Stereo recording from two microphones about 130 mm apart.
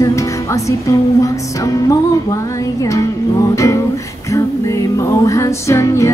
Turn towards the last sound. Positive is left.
turn(degrees=20)  # may be behind; listen again after turning